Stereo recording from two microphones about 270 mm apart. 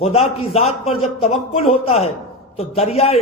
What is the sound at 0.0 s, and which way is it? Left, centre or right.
A man's voice, left.